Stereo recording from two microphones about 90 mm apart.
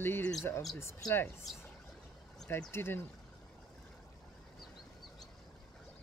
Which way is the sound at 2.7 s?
25° left (ahead or behind).